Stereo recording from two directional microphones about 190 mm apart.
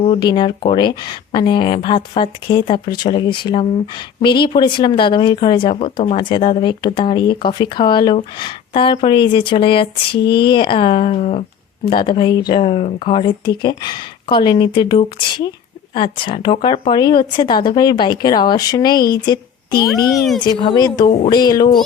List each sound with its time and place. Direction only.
0.0 s speech: 25° left (ahead or behind)
20.1 s speech: centre (ahead or behind)
20.4 s speech: 25° left (ahead or behind)